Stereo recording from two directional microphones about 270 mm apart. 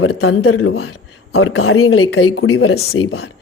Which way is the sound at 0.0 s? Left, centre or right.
Left.